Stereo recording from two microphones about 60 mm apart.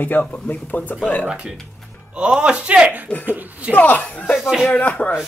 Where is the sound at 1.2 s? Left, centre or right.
Centre.